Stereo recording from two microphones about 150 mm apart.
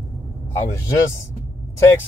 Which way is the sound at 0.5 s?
20° left (ahead or behind).